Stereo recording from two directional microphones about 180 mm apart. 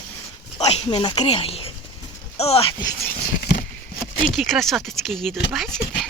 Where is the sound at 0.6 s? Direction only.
35° left (ahead or behind).